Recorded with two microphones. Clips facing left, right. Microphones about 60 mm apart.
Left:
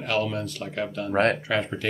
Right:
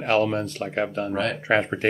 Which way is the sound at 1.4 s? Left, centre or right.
Right.